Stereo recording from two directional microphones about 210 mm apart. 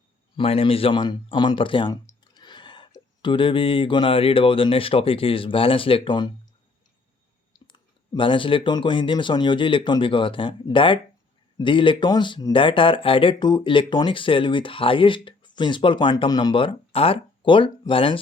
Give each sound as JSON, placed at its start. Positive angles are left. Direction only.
{"t": 0.3, "sound": "speech", "side_deg": 25}
{"t": 7.7, "sound": "speech", "side_deg": 25}